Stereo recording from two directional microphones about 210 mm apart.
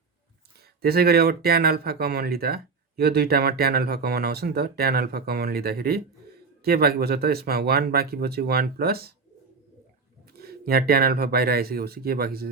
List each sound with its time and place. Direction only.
0.8 s speech: 45° right (ahead or behind)
10.3 s speech: 45° right (ahead or behind)